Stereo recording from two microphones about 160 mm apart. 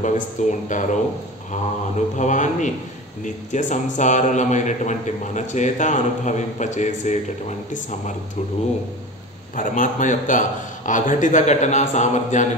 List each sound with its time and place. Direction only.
0.0 s a man's voice: 50° left (ahead or behind)
2.1 s a man's voice: 50° left (ahead or behind)
9.6 s a man's voice: 50° left (ahead or behind)